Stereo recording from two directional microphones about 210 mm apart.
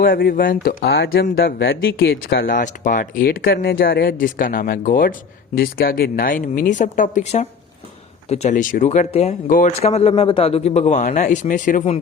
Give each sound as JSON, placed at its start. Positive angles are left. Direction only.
{"t": 0.0, "sound": "speech", "side_deg": 45}